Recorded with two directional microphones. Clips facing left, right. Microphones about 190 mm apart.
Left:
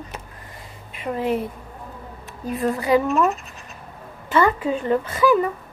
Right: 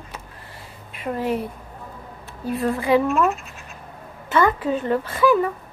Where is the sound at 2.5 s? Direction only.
Centre (ahead or behind).